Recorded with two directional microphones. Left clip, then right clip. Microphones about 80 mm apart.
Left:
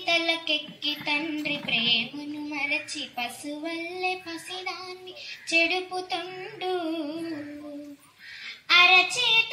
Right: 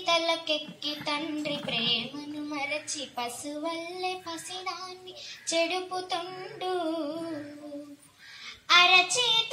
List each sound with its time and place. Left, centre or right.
0.0 s child singing: right
1.0 s a woman's voice: right
8.6 s child singing: right